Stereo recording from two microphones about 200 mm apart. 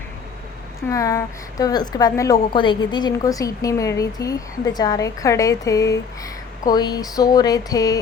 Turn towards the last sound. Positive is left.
turn(degrees=15)  # may be behind; listen again after turning